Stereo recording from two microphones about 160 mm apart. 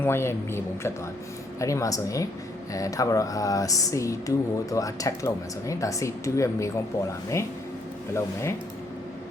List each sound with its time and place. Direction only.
0.0 s speech: 15° left (ahead or behind)
8.1 s speech: 15° left (ahead or behind)